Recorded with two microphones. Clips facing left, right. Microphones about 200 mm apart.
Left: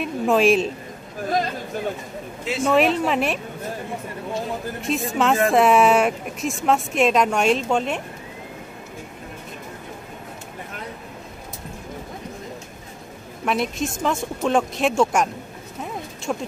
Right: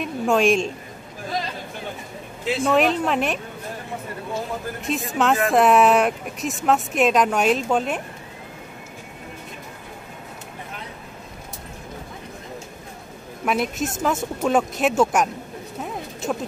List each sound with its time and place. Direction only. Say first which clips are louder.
0.0 s speech: left 1 dB; centre (ahead or behind)
2.4 s speech: even; centre (ahead or behind)
4.8 s speech: left 1 dB; centre (ahead or behind)
13.5 s speech: even; 5° right (ahead or behind)
15.8 s a sound: right 1 dB; 5° right (ahead or behind)